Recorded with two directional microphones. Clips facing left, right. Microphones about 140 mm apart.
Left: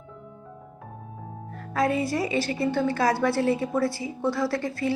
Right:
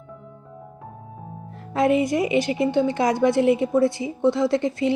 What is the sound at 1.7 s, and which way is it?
A woman's voice, 20° right (ahead or behind).